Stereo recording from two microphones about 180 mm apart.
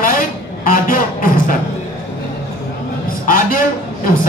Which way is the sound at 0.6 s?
50° left (ahead or behind).